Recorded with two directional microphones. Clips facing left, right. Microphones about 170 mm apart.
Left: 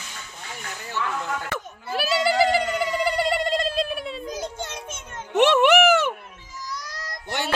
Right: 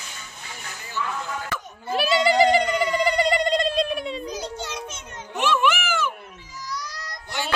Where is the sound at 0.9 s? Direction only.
65° left (ahead or behind).